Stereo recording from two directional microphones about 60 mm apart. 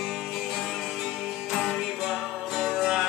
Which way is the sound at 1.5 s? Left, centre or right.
Centre.